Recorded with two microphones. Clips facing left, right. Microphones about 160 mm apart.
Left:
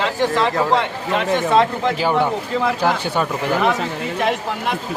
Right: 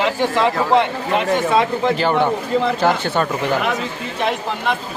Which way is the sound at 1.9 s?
5° left (ahead or behind).